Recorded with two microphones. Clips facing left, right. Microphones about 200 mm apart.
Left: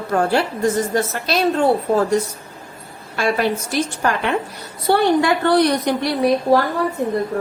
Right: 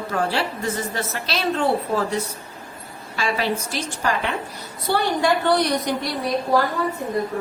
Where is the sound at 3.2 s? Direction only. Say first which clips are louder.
Left 5 dB; 55° left (ahead or behind).